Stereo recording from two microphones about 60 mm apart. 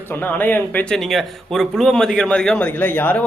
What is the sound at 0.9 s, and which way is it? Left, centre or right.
A man's voice, centre.